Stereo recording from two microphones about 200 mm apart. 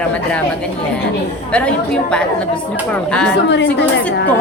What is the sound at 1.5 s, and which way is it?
A woman's voice, 5° left (ahead or behind).